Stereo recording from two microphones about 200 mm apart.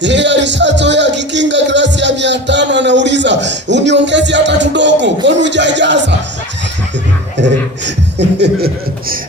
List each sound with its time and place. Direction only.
0.0 s music: 60° right (ahead or behind)
7.4 s chuckle: 60° right (ahead or behind)